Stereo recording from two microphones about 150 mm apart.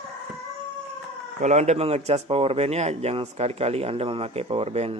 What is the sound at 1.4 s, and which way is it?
A man's voice, 50° right (ahead or behind).